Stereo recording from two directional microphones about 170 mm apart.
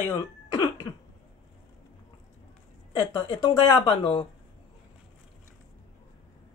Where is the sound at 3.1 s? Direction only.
25° left (ahead or behind).